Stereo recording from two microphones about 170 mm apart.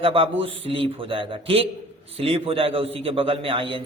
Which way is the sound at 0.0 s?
35° right (ahead or behind).